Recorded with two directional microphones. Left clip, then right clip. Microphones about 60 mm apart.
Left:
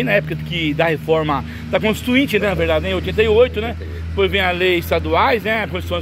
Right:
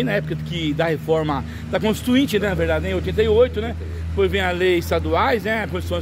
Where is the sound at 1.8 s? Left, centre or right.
Right.